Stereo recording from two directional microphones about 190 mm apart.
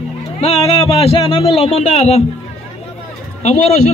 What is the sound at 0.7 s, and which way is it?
A man's voice, 30° left (ahead or behind).